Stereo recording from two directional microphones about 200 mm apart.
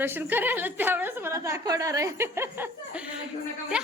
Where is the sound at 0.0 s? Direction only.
10° right (ahead or behind).